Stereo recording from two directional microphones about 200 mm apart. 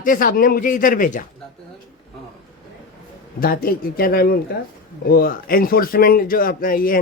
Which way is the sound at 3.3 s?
45° left (ahead or behind).